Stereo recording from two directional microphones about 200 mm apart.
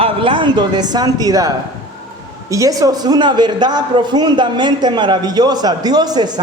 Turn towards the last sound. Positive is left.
turn(degrees=-20)  # may be behind; listen again after turning